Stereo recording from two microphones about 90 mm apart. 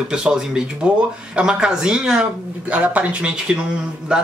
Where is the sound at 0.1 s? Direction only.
10° right (ahead or behind).